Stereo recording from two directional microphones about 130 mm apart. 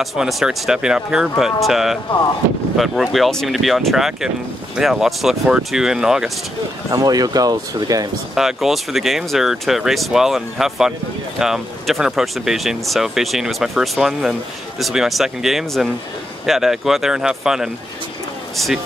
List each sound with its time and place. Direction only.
0.0 s speech: centre (ahead or behind)
6.9 s speech: 30° right (ahead or behind)
8.4 s speech: 5° right (ahead or behind)